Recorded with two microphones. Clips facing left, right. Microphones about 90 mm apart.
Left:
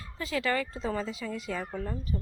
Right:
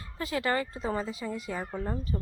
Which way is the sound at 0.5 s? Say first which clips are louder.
Right 1 dB; 30° right (ahead or behind).